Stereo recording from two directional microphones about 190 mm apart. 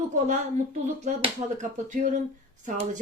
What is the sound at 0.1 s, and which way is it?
Speech, 40° right (ahead or behind).